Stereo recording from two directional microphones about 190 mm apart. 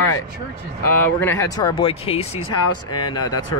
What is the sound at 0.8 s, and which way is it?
Speech, 10° left (ahead or behind).